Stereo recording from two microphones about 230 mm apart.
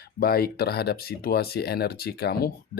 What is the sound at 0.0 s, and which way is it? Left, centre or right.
Speech, left.